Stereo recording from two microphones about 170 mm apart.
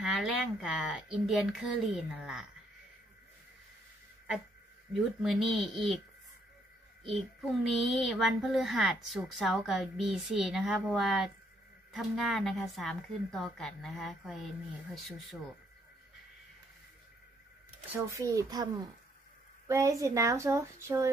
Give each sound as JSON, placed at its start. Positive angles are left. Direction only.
{"t": 0.0, "sound": "a child's voice", "side_deg": 0}
{"t": 5.2, "sound": "a child's voice", "side_deg": 0}
{"t": 7.1, "sound": "a child's voice", "side_deg": 0}
{"t": 17.9, "sound": "speech", "side_deg": -20}
{"t": 19.7, "sound": "a child's voice", "side_deg": -20}